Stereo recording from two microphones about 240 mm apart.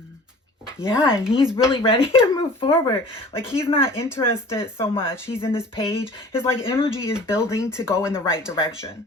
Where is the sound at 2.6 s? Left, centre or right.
Centre.